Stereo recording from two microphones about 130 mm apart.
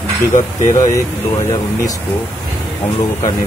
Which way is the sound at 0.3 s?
75° left (ahead or behind).